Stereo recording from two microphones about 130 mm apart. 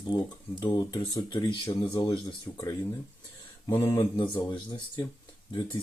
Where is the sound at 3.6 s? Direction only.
20° left (ahead or behind).